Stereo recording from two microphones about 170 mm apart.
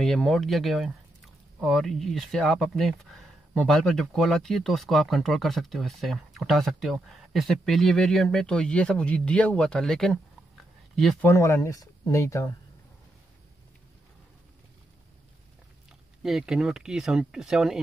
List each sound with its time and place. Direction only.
0.0 s speech: 5° left (ahead or behind)
11.2 s speech: 15° left (ahead or behind)
16.2 s speech: centre (ahead or behind)